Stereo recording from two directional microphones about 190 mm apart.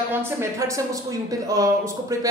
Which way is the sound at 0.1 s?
15° right (ahead or behind).